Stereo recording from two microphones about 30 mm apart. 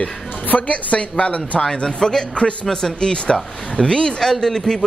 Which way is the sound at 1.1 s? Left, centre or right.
Left.